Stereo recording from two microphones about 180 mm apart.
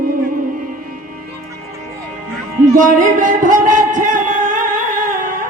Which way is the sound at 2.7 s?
45° right (ahead or behind).